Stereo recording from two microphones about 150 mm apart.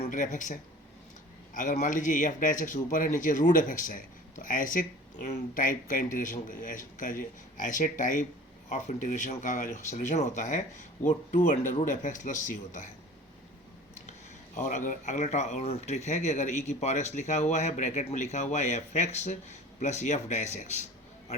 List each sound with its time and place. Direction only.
0.0 s speech: 60° left (ahead or behind)
14.1 s speech: 60° left (ahead or behind)